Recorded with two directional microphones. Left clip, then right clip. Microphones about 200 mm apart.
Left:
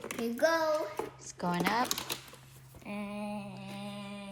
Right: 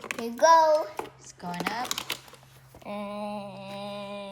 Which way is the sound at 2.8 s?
45° right (ahead or behind).